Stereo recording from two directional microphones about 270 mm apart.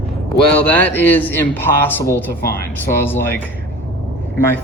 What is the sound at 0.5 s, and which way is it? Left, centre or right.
Speech, centre.